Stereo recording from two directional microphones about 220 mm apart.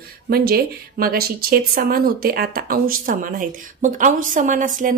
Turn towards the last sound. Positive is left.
turn(degrees=-35)  # may be behind; listen again after turning